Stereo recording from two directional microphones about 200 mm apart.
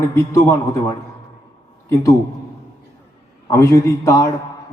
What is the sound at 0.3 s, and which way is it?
Speech, 15° left (ahead or behind).